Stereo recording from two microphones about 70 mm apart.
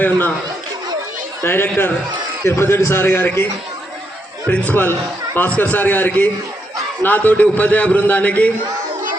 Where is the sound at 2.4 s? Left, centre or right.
Left.